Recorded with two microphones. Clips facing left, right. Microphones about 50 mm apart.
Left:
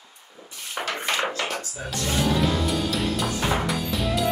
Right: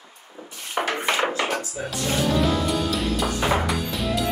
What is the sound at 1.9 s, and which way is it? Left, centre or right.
Music, centre.